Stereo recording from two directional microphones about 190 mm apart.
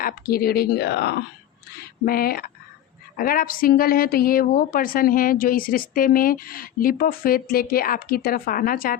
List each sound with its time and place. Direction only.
0.0 s a woman's voice: 55° left (ahead or behind)